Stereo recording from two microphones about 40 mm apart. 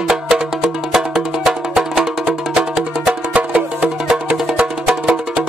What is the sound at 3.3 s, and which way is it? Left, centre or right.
Music, right.